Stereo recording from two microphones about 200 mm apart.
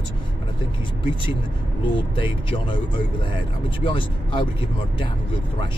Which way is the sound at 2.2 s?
25° left (ahead or behind).